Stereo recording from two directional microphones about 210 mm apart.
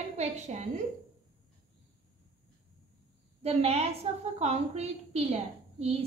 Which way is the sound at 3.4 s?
30° right (ahead or behind).